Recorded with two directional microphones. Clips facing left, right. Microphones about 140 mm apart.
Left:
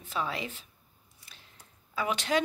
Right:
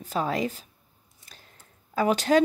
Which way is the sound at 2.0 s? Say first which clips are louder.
Right 8 dB; 40° right (ahead or behind).